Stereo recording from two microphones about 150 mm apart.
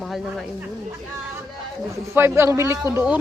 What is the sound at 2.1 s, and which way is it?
Speech, 15° right (ahead or behind).